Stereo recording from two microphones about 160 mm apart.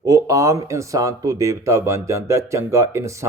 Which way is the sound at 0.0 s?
20° right (ahead or behind).